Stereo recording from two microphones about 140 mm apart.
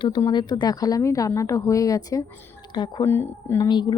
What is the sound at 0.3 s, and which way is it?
A woman's voice, 30° left (ahead or behind).